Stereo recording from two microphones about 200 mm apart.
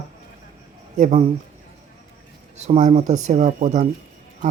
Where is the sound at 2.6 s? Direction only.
35° right (ahead or behind).